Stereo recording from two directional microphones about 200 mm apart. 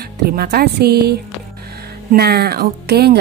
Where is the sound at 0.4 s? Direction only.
50° right (ahead or behind).